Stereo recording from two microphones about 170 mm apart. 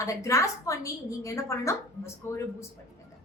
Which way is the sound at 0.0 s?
20° left (ahead or behind).